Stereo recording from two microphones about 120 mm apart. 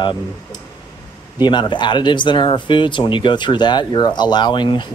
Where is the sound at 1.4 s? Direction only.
40° left (ahead or behind).